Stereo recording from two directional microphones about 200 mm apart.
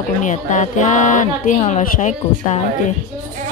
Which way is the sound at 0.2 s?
40° left (ahead or behind).